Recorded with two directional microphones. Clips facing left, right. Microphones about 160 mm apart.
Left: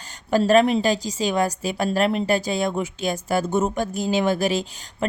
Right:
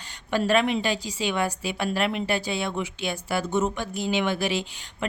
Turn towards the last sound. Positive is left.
turn(degrees=40)  # may be behind; listen again after turning